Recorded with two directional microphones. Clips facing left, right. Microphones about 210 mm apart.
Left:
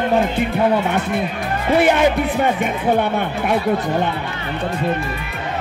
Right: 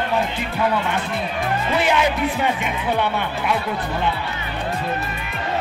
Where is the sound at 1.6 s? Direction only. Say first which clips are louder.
Left 7 dB; 50° left (ahead or behind).